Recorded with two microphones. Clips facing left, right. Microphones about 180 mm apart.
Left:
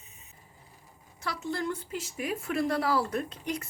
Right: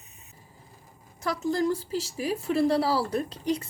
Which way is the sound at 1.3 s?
40° right (ahead or behind).